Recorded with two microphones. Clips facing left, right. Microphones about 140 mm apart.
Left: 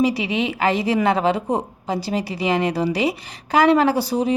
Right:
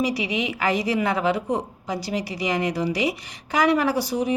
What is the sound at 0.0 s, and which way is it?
A woman's voice, 30° left (ahead or behind).